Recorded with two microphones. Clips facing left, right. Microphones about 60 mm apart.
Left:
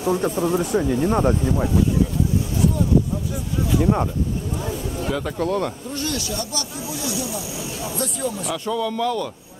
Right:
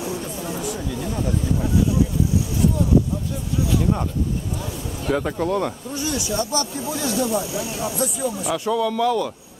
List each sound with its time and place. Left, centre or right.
0.1 s speech: left
3.8 s speech: left
5.1 s speech: centre
6.1 s speech: centre
6.5 s speech: right
8.0 s speech: centre